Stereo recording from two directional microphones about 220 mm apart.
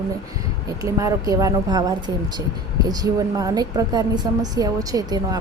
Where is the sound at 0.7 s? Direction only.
15° right (ahead or behind).